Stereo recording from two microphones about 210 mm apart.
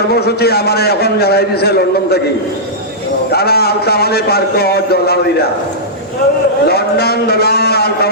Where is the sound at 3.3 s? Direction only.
50° left (ahead or behind).